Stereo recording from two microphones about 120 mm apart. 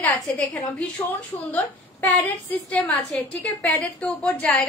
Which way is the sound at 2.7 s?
5° left (ahead or behind).